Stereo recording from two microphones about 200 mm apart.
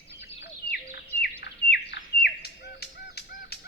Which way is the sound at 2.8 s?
50° left (ahead or behind).